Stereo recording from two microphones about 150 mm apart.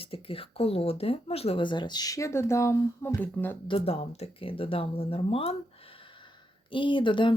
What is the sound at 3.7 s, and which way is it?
Speech, 40° left (ahead or behind).